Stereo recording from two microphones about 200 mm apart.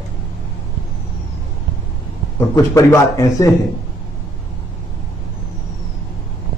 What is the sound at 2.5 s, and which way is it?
A man's voice, 15° left (ahead or behind).